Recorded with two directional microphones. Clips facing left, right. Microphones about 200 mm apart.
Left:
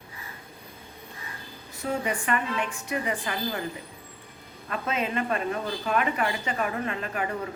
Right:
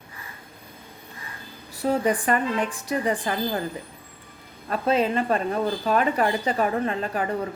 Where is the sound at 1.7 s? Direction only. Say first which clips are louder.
Right 6 dB; 35° right (ahead or behind).